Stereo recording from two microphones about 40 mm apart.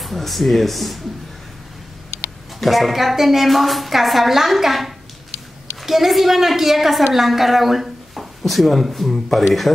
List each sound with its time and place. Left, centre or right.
0.0 s a woman's voice: centre
2.6 s a woman's voice: centre